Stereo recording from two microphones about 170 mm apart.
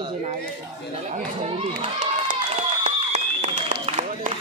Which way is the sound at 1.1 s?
45° right (ahead or behind).